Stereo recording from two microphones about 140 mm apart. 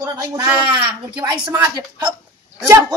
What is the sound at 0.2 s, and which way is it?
Speech, 20° right (ahead or behind).